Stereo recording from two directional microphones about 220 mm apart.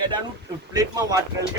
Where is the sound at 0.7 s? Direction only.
15° right (ahead or behind).